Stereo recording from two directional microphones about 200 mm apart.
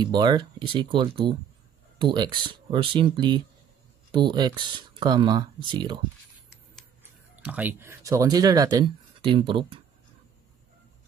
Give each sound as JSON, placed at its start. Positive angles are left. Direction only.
{"t": 0.0, "sound": "speech", "side_deg": -20}
{"t": 7.3, "sound": "speech", "side_deg": -5}